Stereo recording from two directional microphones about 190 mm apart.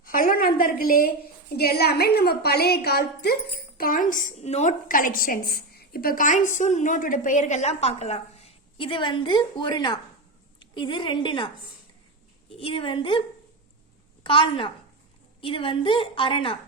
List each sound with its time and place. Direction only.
0.0 s a woman's voice: 50° left (ahead or behind); by 13.2 s 25° left (ahead or behind)
14.3 s a woman's voice: 25° left (ahead or behind)